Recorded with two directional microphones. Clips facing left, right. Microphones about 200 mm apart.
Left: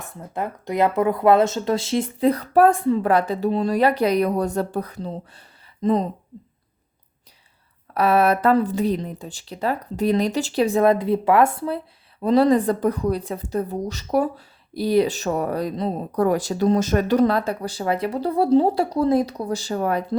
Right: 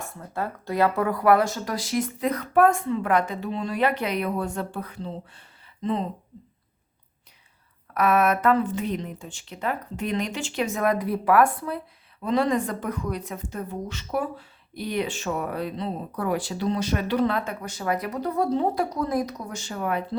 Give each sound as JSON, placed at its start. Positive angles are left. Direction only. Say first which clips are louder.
{"t": 0.0, "sound": "a woman's voice", "louder": "left 2 dB", "side_deg": 20}
{"t": 7.9, "sound": "a woman's voice", "louder": "left 3 dB", "side_deg": 30}